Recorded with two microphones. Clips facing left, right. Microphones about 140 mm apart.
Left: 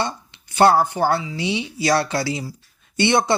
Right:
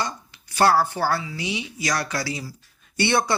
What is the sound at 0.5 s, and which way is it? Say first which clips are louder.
Speech: left 4 dB; 25° left (ahead or behind).